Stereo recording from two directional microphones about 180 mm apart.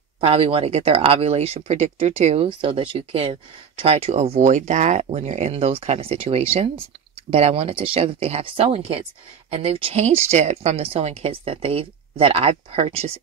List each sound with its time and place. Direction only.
0.2 s speech: 30° right (ahead or behind)